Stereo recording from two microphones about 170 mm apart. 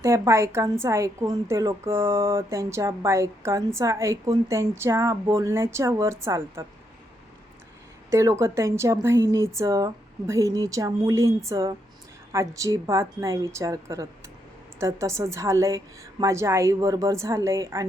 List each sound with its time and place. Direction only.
0.0 s a woman's voice: 15° right (ahead or behind)
8.1 s a woman's voice: 15° right (ahead or behind)